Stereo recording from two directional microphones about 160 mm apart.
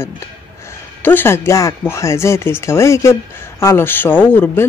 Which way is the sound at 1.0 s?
15° left (ahead or behind).